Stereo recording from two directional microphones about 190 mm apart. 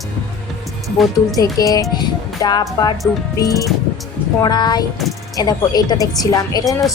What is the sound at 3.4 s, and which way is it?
A woman's voice, 15° left (ahead or behind).